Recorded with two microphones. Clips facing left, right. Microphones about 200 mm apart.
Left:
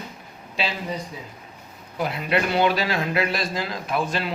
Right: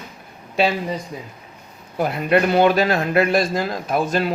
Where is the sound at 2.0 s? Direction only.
50° right (ahead or behind).